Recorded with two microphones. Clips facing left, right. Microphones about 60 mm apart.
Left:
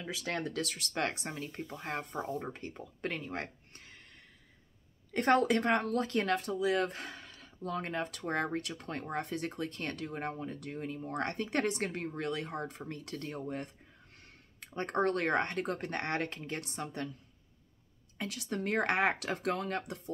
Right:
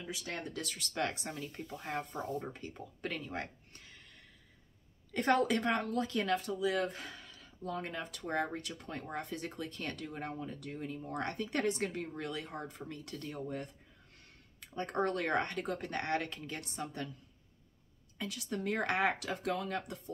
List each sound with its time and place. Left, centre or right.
0.0 s speech: left
1.2 s speech: left
2.5 s speech: left
5.1 s speech: left
9.6 s speech: left
14.8 s speech: left
18.1 s speech: left